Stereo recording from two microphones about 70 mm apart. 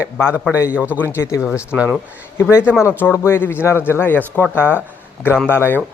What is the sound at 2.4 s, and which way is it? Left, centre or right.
Speech, left.